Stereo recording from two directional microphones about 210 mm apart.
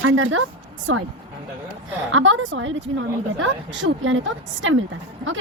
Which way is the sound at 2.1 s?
65° right (ahead or behind).